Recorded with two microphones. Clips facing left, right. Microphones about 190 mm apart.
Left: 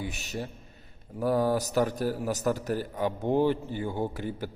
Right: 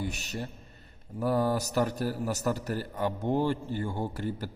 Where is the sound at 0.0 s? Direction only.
Centre (ahead or behind).